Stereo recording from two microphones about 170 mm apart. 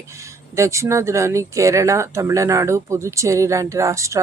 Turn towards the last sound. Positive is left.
turn(degrees=-15)  # may be behind; listen again after turning